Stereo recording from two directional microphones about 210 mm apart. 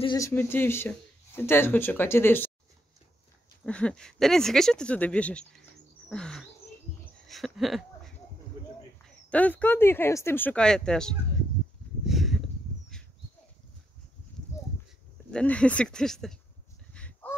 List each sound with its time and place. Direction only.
0.0 s speech: 20° left (ahead or behind)
0.3 s speech: 10° left (ahead or behind)
3.6 s speech: 5° left (ahead or behind)
6.0 s chirp: 5° left (ahead or behind)
7.2 s a sound: centre (ahead or behind)
9.3 s speech: 5° left (ahead or behind)
12.1 s a sound: centre (ahead or behind)
15.3 s speech: 5° left (ahead or behind)
16.9 s a sound: 5° left (ahead or behind)